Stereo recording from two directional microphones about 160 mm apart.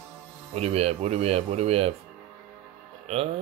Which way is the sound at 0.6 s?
40° right (ahead or behind).